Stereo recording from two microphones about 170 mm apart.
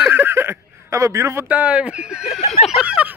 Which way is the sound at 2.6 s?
5° right (ahead or behind).